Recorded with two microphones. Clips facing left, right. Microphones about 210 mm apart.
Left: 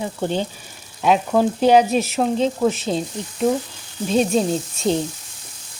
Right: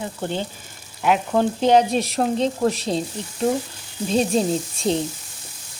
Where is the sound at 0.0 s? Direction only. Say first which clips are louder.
Left 4 dB; 15° left (ahead or behind); by 5.0 s centre (ahead or behind).